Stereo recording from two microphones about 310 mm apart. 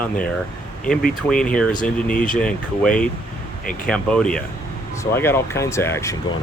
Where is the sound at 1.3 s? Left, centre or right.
Centre.